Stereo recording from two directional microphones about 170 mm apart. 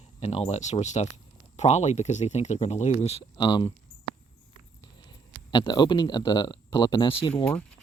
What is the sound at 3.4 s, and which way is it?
Speech, 25° left (ahead or behind).